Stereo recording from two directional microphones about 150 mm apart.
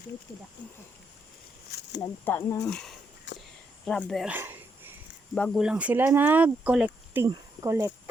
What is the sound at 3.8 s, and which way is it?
Speech, centre (ahead or behind).